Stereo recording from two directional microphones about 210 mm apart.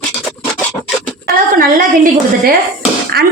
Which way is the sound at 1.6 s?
45° right (ahead or behind).